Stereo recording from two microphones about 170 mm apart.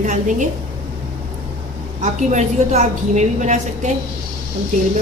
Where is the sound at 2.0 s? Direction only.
45° right (ahead or behind).